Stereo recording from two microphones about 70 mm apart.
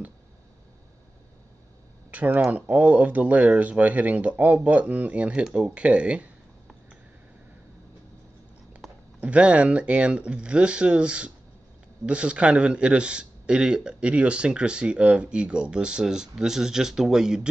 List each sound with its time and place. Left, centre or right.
2.0 s a man's voice: right
8.8 s a sound: centre
9.2 s a man's voice: centre